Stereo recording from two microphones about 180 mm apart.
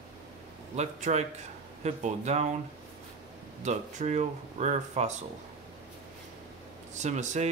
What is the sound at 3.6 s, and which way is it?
Speech, 40° right (ahead or behind).